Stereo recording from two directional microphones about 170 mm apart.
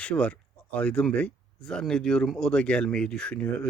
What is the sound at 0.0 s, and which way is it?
Speech, 5° left (ahead or behind).